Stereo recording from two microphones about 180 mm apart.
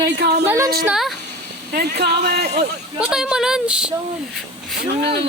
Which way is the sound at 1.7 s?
60° right (ahead or behind).